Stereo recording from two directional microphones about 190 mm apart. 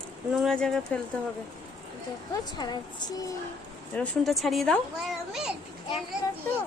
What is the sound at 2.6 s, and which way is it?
Speech, 20° left (ahead or behind).